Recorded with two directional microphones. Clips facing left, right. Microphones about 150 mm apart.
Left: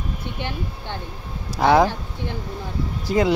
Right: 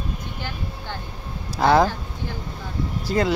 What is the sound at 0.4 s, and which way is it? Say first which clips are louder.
Speech: left 3 dB; 25° left (ahead or behind).